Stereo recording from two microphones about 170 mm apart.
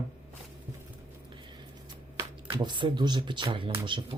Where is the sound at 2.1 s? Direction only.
20° right (ahead or behind).